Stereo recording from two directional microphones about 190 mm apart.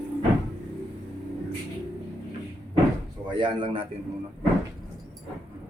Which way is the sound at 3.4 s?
25° right (ahead or behind).